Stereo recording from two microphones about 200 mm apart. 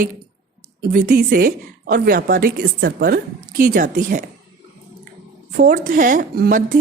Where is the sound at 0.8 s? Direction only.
50° right (ahead or behind).